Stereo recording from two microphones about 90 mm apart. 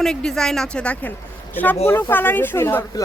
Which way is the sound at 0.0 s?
5° left (ahead or behind).